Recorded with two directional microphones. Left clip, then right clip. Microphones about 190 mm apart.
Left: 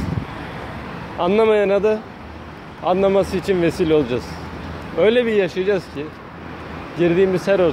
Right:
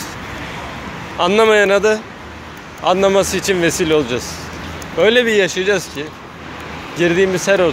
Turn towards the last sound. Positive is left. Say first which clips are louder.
# right 2 dB
turn(degrees=10)  # may be behind; listen again after turning